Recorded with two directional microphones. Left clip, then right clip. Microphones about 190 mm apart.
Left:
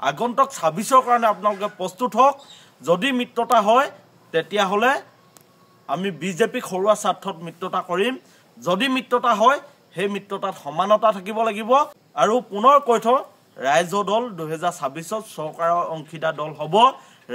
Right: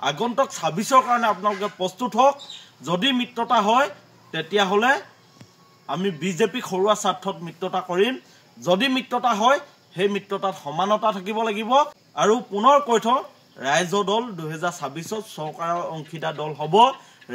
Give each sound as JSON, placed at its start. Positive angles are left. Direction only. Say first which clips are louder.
{"t": 0.0, "sound": "a man's voice", "louder": "left 2 dB", "side_deg": 30}